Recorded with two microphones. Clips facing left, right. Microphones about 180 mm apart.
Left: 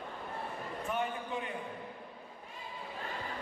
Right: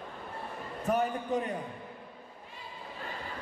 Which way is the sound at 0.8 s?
40° right (ahead or behind).